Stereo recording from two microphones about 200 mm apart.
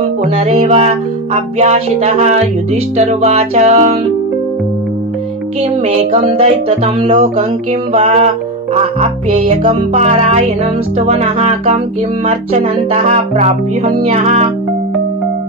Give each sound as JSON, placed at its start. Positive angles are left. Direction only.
{"t": 0.2, "sound": "music", "side_deg": -30}
{"t": 5.6, "sound": "music", "side_deg": -30}
{"t": 12.9, "sound": "music", "side_deg": -35}